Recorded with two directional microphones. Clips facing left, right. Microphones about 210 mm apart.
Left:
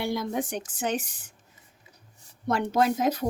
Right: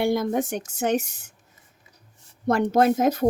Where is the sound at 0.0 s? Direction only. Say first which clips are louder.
Right 6 dB; 50° right (ahead or behind).